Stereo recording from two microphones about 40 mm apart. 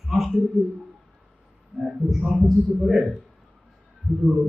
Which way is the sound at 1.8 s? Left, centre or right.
Centre.